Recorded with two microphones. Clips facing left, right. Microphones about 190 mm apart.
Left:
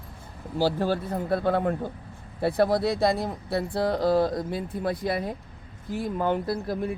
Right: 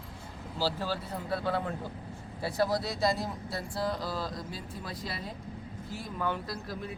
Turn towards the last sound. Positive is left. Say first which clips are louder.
# left 10 dB
turn(degrees=45)  # may be behind; listen again after turning